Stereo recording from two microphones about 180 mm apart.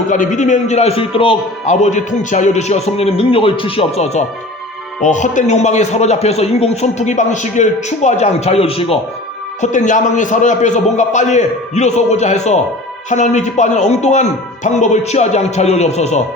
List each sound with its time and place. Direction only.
0.1 s a man's voice: 45° left (ahead or behind)
9.6 s a man's voice: 45° left (ahead or behind)